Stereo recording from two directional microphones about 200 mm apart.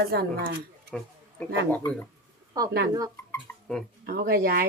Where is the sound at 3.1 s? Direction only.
10° left (ahead or behind).